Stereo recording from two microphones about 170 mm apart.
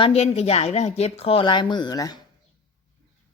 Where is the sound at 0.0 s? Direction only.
40° left (ahead or behind); by 2.1 s 20° left (ahead or behind).